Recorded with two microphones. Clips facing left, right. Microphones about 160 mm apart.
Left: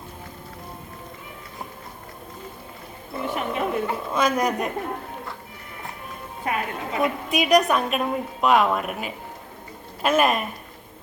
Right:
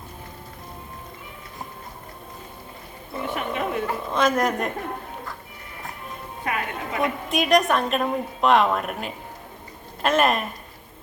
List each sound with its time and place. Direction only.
3.3 s a sound: 35° left (ahead or behind)
4.1 s a woman's voice: centre (ahead or behind)
6.4 s a woman's voice: 30° left (ahead or behind)
7.3 s a woman's voice: centre (ahead or behind)